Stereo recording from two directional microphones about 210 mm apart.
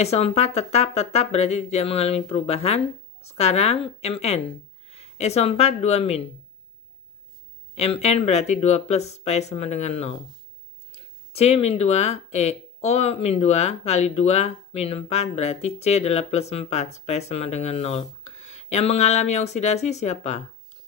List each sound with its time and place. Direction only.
0.0 s speech: 30° left (ahead or behind)
7.8 s speech: 30° left (ahead or behind)
11.3 s speech: 30° left (ahead or behind)